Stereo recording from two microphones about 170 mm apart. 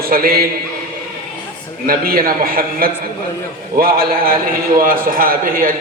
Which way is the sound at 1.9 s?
60° right (ahead or behind).